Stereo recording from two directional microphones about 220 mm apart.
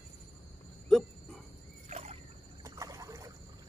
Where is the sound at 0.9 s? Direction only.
Centre (ahead or behind).